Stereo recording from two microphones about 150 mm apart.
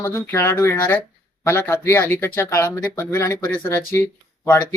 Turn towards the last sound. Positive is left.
turn(degrees=20)  # may be behind; listen again after turning